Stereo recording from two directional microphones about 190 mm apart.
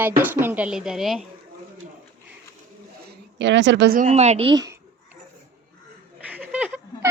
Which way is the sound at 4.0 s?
35° right (ahead or behind).